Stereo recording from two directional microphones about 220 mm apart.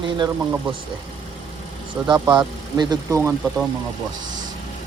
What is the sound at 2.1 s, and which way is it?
Speech, 20° right (ahead or behind).